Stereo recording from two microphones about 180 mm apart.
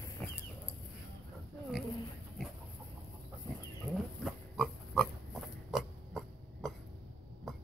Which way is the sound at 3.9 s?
Centre (ahead or behind).